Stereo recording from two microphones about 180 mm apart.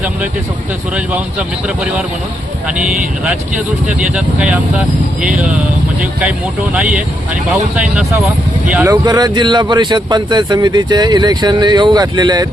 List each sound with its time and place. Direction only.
0.9 s speech: 5° right (ahead or behind)
3.8 s speech: 5° right (ahead or behind)
6.7 s speech: 5° right (ahead or behind)
8.9 s speech: 20° right (ahead or behind)